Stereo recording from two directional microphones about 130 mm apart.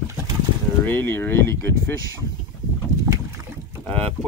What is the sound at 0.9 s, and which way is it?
Speech, 20° left (ahead or behind).